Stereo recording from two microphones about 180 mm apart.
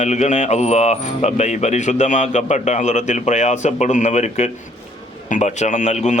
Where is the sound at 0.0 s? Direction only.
40° left (ahead or behind).